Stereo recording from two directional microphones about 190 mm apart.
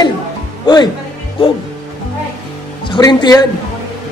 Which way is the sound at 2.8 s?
25° left (ahead or behind).